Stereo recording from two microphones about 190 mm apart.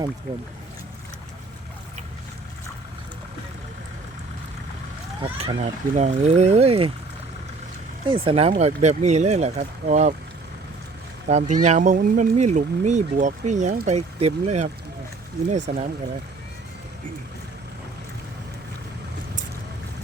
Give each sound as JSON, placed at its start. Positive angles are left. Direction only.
{"t": 5.2, "sound": "speech", "side_deg": -30}
{"t": 8.0, "sound": "speech", "side_deg": -25}
{"t": 11.3, "sound": "speech", "side_deg": -40}
{"t": 15.7, "sound": "speech", "side_deg": -35}